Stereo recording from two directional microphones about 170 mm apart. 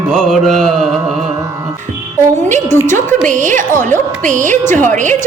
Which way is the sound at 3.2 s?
50° right (ahead or behind).